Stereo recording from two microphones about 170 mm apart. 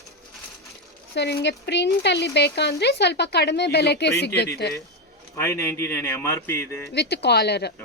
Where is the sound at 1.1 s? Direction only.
80° left.